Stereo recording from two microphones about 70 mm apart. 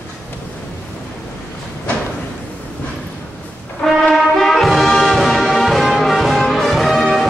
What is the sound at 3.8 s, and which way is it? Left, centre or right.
Music, centre.